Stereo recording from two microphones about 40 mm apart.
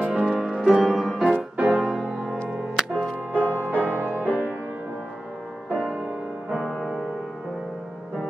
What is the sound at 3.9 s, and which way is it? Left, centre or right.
Music, right.